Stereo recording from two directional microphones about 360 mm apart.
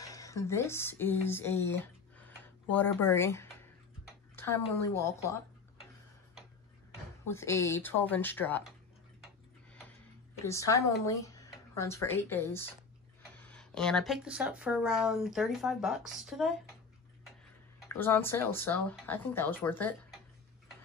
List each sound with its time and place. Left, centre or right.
0.0 s speech: centre
4.9 s speech: centre
7.2 s speech: centre
10.4 s speech: centre
17.8 s speech: centre